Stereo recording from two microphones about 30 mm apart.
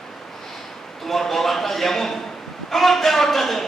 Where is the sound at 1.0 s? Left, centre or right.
Centre.